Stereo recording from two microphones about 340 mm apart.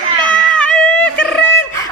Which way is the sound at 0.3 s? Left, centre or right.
Centre.